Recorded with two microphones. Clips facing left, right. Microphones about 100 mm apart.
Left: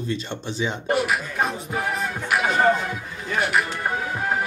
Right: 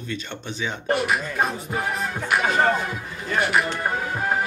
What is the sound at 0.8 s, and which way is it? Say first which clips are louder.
Speech: right 1 dB; centre (ahead or behind).